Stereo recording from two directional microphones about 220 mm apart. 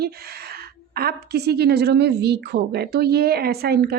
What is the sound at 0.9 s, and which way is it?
A woman's voice, 45° right (ahead or behind).